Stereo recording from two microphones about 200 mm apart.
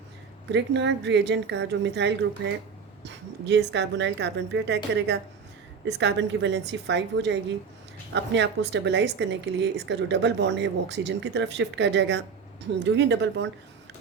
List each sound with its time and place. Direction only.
0.5 s a woman's voice: 60° right (ahead or behind)